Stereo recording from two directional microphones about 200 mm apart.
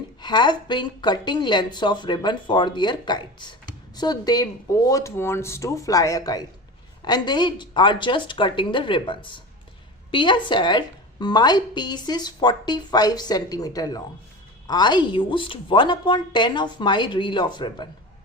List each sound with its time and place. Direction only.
0.2 s a woman's voice: 20° left (ahead or behind)